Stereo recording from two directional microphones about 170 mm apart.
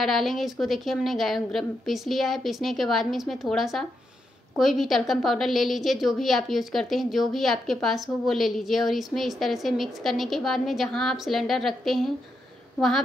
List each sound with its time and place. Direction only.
0.0 s a woman's voice: centre (ahead or behind)